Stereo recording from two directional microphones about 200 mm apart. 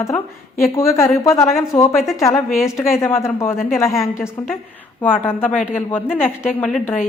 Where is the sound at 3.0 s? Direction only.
10° left (ahead or behind).